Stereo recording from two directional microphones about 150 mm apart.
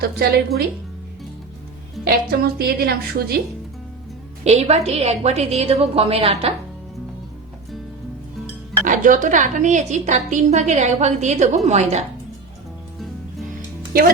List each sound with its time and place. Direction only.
0.0 s a woman's voice: 90° right
2.0 s a woman's voice: 90° right
4.4 s speech: 45° right (ahead or behind)
8.8 s speech: 60° right (ahead or behind)
13.9 s speech: 80° right